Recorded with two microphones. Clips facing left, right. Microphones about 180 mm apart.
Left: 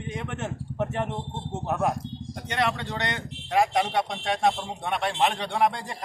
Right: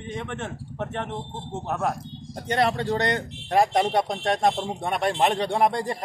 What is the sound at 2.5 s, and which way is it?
Speech, 35° right (ahead or behind).